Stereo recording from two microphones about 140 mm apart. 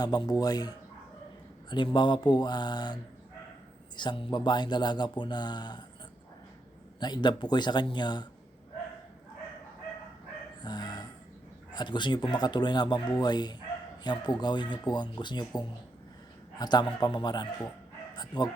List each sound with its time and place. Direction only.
0.0 s speech: 30° left (ahead or behind)
7.0 s speech: 30° left (ahead or behind)
10.6 s dog: 30° left (ahead or behind)
11.7 s speech: 30° left (ahead or behind)